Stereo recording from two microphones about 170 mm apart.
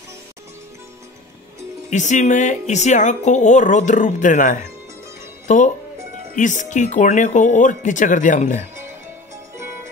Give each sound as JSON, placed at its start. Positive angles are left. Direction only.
{"t": 1.9, "sound": "a woman's voice", "side_deg": 45}